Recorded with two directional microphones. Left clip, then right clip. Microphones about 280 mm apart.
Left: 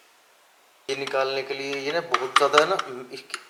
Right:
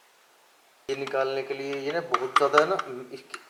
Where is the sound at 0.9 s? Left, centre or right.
Centre.